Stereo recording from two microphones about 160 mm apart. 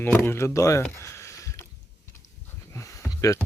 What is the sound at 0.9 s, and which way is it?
Sniff, 15° left (ahead or behind).